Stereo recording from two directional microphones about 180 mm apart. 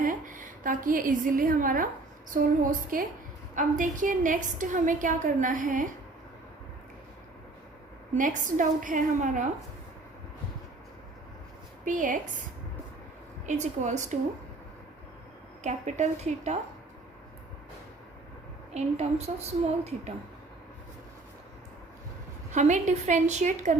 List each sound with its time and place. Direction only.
0.0 s a woman's voice: 50° right (ahead or behind)
8.1 s a woman's voice: 45° right (ahead or behind)
11.9 s a woman's voice: 45° right (ahead or behind)
13.4 s a woman's voice: 40° right (ahead or behind)
15.6 s a woman's voice: 40° right (ahead or behind)
18.7 s a woman's voice: 40° right (ahead or behind)
22.5 s a woman's voice: 40° right (ahead or behind)